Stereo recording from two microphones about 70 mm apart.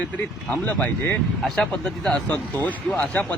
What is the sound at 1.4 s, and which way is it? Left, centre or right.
Speech, centre.